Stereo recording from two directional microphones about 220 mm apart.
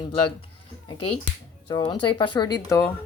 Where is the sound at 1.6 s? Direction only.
20° left (ahead or behind).